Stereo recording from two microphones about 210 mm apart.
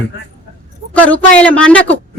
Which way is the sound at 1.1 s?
5° left (ahead or behind).